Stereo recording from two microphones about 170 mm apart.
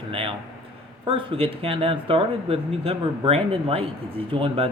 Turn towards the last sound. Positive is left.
turn(degrees=-30)  # may be behind; listen again after turning